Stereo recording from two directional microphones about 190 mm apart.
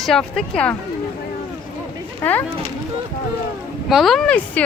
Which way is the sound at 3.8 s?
Centre (ahead or behind).